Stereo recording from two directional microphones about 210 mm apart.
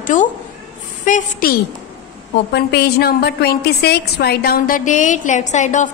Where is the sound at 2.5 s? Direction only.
50° left (ahead or behind); by 5.9 s 35° left (ahead or behind).